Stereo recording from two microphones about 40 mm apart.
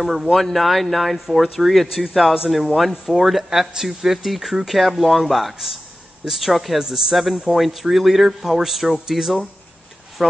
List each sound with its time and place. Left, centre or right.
0.0 s speech: centre